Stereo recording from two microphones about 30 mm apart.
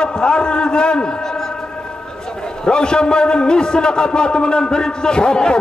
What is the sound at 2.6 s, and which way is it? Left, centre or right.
A man's voice, left.